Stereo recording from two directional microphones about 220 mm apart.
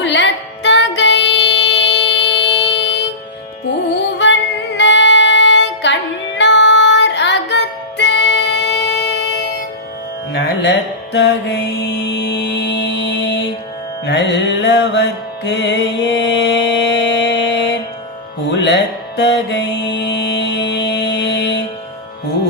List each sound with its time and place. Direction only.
0.0 s music: 55° left (ahead or behind)
11.1 s music: 50° left (ahead or behind)